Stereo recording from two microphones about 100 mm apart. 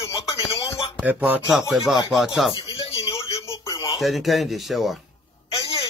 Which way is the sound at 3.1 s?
30° left (ahead or behind).